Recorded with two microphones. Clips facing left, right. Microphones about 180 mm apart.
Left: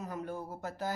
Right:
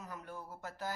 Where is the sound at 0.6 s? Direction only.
20° left (ahead or behind).